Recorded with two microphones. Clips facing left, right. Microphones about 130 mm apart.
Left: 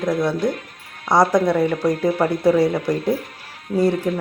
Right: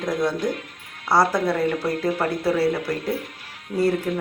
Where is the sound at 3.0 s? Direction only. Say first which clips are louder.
Left 5 dB; 35° left (ahead or behind).